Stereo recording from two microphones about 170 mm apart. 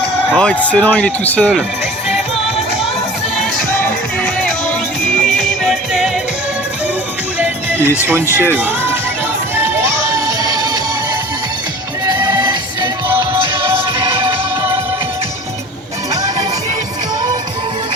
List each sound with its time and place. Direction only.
0.3 s speech: 5° left (ahead or behind)
5.2 s music: centre (ahead or behind)
7.3 s music: 10° right (ahead or behind)
9.8 s music: 15° right (ahead or behind)
12.0 s music: 25° right (ahead or behind)